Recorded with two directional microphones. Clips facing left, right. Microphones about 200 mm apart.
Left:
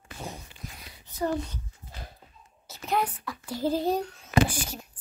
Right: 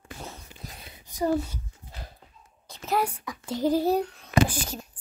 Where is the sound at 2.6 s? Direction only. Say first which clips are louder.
Even; 5° left (ahead or behind).